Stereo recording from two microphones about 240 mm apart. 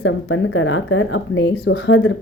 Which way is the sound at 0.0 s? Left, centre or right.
Left.